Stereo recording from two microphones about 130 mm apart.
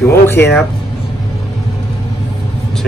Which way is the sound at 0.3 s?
20° left (ahead or behind).